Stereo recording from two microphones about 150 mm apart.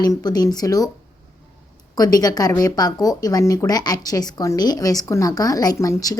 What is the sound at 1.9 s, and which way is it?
Speech, 25° left (ahead or behind).